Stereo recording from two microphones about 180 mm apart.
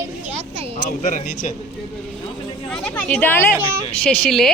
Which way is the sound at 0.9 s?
50° left (ahead or behind).